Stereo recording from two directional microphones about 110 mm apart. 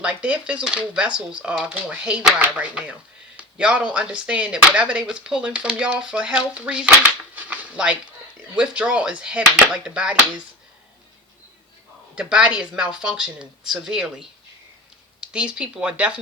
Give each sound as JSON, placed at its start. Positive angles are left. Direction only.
{"t": 0.0, "sound": "speech", "side_deg": -10}
{"t": 3.3, "sound": "a sound", "side_deg": -10}
{"t": 3.9, "sound": "speech", "side_deg": -10}
{"t": 7.3, "sound": "a sound", "side_deg": -15}
{"t": 8.5, "sound": "speech", "side_deg": -10}
{"t": 12.1, "sound": "speech", "side_deg": -10}